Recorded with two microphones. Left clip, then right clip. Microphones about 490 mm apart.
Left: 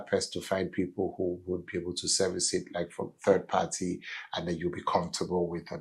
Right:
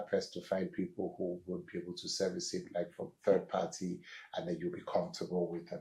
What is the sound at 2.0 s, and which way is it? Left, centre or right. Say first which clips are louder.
Speech: left 7 dB; left.